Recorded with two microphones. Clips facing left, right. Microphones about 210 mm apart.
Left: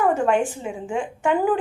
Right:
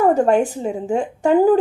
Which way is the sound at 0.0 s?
40° right (ahead or behind).